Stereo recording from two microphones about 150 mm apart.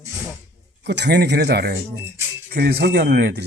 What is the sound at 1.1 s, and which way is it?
Speech, 90° right.